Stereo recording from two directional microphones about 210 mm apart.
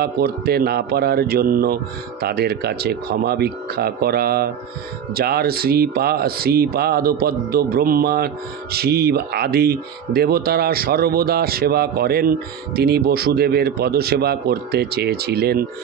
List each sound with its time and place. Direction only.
0.0 s speech: 45° right (ahead or behind)